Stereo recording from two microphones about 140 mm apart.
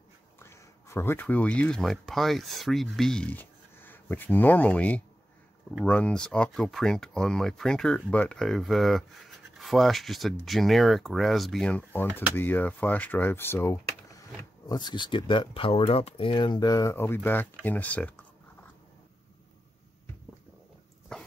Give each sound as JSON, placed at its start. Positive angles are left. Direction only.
{"t": 0.4, "sound": "speech", "side_deg": 20}
{"t": 14.7, "sound": "speech", "side_deg": 30}
{"t": 21.1, "sound": "dog", "side_deg": 5}